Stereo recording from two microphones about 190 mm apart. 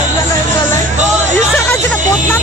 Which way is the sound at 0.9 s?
40° right (ahead or behind).